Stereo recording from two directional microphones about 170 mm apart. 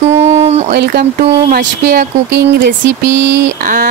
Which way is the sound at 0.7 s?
70° right (ahead or behind).